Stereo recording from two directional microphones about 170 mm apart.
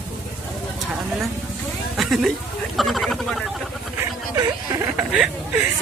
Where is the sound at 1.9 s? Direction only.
Centre (ahead or behind).